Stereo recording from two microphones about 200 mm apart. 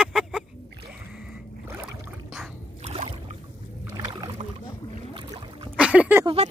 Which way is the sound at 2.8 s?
30° right (ahead or behind).